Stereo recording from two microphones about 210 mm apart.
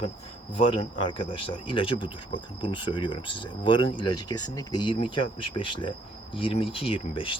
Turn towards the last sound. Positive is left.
turn(degrees=25)  # may be behind; listen again after turning